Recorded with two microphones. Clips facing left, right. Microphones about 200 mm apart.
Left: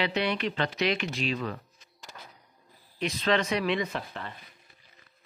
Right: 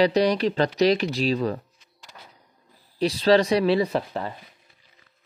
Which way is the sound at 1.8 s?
45° left (ahead or behind).